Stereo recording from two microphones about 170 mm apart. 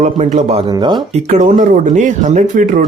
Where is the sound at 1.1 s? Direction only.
45° right (ahead or behind).